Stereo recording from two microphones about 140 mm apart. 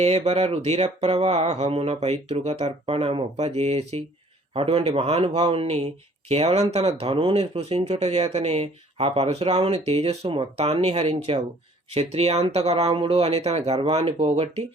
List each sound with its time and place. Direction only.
0.0 s speech: 50° right (ahead or behind)